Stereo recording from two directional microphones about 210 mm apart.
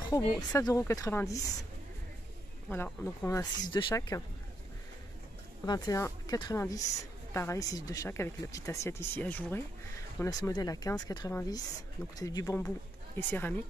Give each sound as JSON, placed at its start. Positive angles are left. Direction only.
{"t": 0.1, "sound": "speech", "side_deg": 15}
{"t": 2.7, "sound": "speech", "side_deg": 10}
{"t": 5.7, "sound": "speech", "side_deg": 15}